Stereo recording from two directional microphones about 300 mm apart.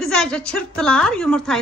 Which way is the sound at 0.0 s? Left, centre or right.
Centre.